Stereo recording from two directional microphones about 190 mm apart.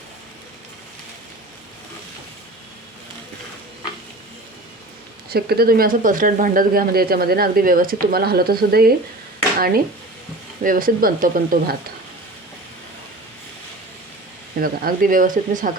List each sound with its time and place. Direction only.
5.3 s speech: 55° right (ahead or behind)
14.6 s speech: 50° right (ahead or behind)